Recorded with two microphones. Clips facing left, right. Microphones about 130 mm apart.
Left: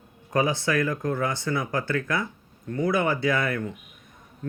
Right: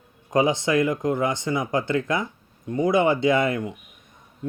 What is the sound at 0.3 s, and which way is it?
Speech, 20° right (ahead or behind).